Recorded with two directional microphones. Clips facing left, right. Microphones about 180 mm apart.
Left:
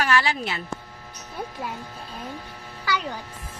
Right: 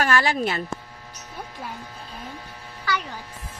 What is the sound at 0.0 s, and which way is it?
Speech, 45° right (ahead or behind).